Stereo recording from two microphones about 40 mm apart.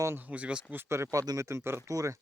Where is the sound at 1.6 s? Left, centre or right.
Right.